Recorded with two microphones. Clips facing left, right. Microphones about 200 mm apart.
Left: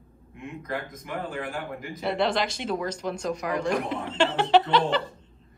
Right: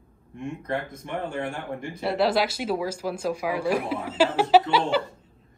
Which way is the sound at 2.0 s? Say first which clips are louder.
Right 2 dB; 5° right (ahead or behind).